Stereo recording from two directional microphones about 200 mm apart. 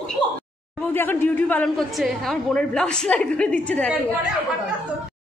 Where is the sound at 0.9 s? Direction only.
10° left (ahead or behind).